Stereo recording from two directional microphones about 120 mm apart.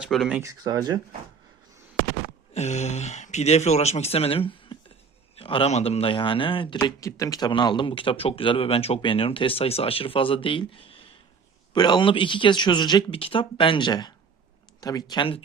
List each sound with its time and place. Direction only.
0.0 s speech: 5° right (ahead or behind)
0.6 s speech: 30° right (ahead or behind)
2.5 s speech: 65° left (ahead or behind); by 4.8 s 50° left (ahead or behind)
5.4 s a sound: 50° left (ahead or behind)
5.7 s speech: 60° left (ahead or behind)
7.0 s speech: 30° left (ahead or behind); by 11.1 s 50° left (ahead or behind)
11.7 s speech: 40° left (ahead or behind)
15.2 s speech: 50° left (ahead or behind)